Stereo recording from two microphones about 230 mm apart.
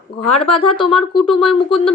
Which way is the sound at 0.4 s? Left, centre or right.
Left.